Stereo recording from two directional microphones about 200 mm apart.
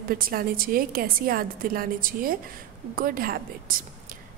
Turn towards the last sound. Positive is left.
turn(degrees=-45)  # may be behind; listen again after turning